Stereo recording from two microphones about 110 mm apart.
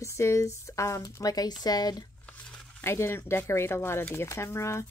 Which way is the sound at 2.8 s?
25° left (ahead or behind).